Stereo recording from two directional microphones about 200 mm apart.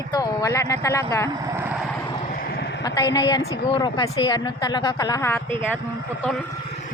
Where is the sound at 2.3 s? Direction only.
50° left (ahead or behind).